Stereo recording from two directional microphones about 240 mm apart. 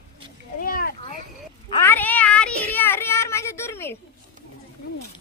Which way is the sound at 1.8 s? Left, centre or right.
Centre.